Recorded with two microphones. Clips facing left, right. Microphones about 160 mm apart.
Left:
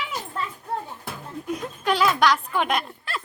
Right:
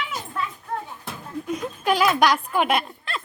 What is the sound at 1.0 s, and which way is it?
Music, centre (ahead or behind).